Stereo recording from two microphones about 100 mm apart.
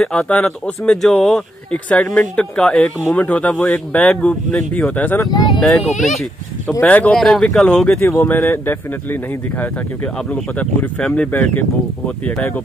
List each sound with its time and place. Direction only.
0.0 s speech: 10° left (ahead or behind)
5.3 s speech: 40° left (ahead or behind)
5.6 s speech: 5° left (ahead or behind)
6.8 s speech: 15° left (ahead or behind)
8.0 s speech: 25° left (ahead or behind)